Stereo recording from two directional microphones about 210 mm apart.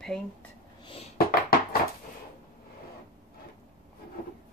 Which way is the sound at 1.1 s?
45° left (ahead or behind).